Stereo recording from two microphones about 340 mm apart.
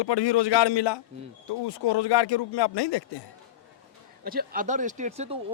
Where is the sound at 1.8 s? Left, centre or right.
Left.